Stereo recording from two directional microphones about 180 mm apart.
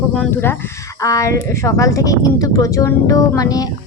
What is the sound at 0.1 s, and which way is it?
Speech, 5° left (ahead or behind).